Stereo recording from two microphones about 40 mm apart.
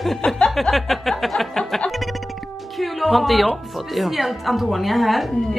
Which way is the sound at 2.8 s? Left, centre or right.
Centre.